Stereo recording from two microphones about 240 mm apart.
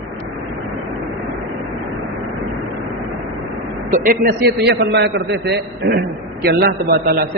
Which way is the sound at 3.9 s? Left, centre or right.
Right.